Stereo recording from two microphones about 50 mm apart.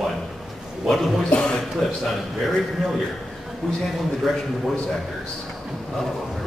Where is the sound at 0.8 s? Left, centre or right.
Centre.